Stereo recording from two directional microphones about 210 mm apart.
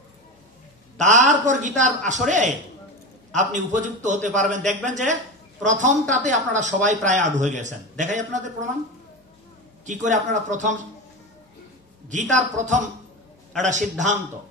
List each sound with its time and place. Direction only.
0.9 s a woman's voice: 35° right (ahead or behind)
9.8 s speech: 35° right (ahead or behind)
12.1 s speech: 35° right (ahead or behind)